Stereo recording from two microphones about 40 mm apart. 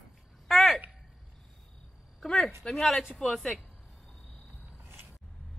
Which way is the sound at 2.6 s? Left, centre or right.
Left.